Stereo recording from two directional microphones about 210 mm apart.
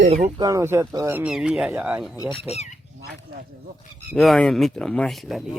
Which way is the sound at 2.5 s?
30° left (ahead or behind).